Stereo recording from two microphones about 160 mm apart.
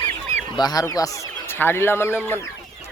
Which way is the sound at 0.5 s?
25° left (ahead or behind).